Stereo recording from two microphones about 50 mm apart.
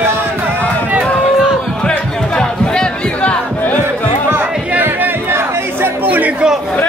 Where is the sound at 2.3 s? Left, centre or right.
Centre.